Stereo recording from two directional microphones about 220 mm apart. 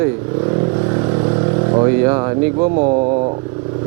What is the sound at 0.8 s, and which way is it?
Vehicle, 20° right (ahead or behind).